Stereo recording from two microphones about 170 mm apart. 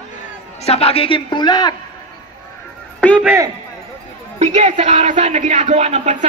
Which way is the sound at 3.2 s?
15° right (ahead or behind).